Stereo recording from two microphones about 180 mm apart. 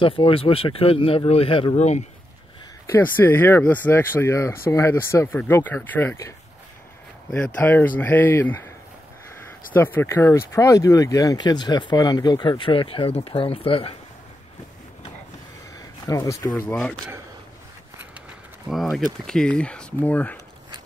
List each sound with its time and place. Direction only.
0.0 s speech: 30° left (ahead or behind)
2.9 s speech: 10° left (ahead or behind)
9.8 s speech: 10° left (ahead or behind); by 13.9 s 30° left (ahead or behind)
16.1 s speech: 20° left (ahead or behind)
18.7 s speech: centre (ahead or behind)